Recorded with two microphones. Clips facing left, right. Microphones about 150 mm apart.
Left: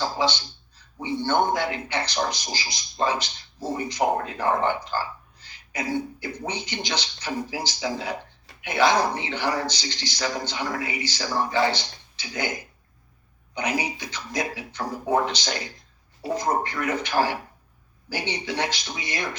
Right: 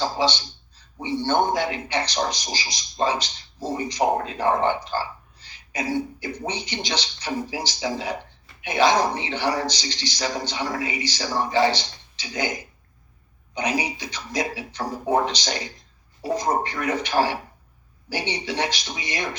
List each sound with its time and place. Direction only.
0.0 s speech: 20° right (ahead or behind)
5.5 s a sound: 20° right (ahead or behind)
6.4 s speech: 15° right (ahead or behind)